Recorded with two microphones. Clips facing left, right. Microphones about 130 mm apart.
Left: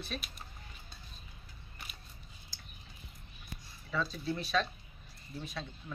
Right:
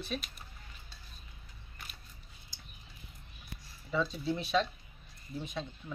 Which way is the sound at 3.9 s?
20° right (ahead or behind).